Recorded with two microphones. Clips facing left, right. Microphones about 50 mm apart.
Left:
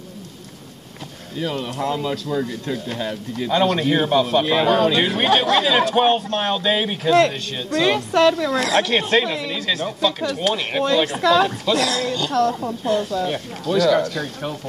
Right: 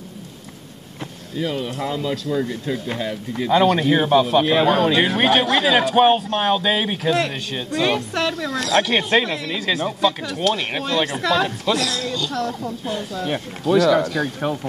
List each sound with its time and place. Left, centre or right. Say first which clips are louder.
1.4 s speech: even; centre
2.4 s a man's voice: right 1 dB; centre
8.5 s speech: left 1 dB; left
8.8 s a man's voice: even; centre
11.8 s a woman's voice: left 3 dB; left
12.8 s a man's voice: left 7 dB; centre